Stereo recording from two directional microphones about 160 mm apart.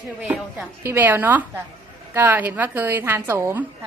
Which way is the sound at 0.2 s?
10° right (ahead or behind).